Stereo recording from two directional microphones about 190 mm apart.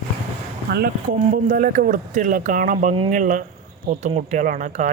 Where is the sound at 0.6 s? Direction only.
55° right (ahead or behind).